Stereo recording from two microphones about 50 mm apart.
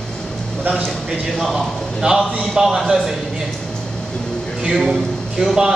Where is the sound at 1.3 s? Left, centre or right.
Centre.